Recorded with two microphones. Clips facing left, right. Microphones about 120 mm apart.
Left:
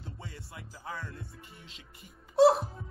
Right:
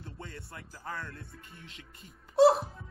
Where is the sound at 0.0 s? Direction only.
10° left (ahead or behind).